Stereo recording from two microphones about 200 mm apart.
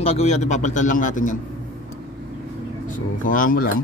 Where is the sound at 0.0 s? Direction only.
30° left (ahead or behind).